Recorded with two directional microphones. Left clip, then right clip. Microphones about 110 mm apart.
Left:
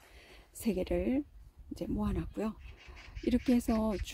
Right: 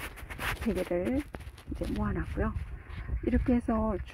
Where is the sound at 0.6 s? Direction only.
40° left (ahead or behind).